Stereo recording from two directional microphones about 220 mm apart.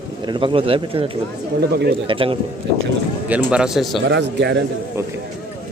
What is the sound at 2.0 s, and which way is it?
Speech, 25° right (ahead or behind).